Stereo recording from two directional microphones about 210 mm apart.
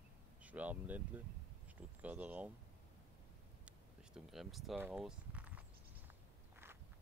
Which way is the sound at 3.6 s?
Centre (ahead or behind).